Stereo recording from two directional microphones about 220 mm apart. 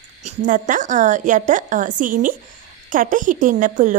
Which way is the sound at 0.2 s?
35° right (ahead or behind).